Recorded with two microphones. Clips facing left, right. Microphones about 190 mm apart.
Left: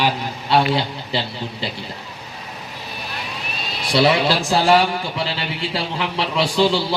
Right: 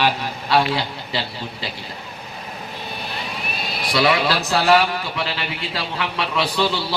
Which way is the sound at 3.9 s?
25° left (ahead or behind).